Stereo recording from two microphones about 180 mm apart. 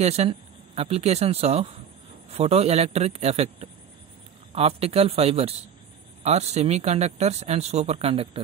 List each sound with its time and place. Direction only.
0.0 s speech: 35° right (ahead or behind)